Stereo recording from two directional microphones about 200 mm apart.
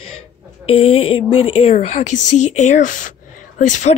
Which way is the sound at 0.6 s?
30° left (ahead or behind).